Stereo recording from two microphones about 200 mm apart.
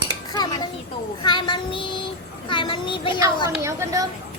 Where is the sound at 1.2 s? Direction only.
25° left (ahead or behind).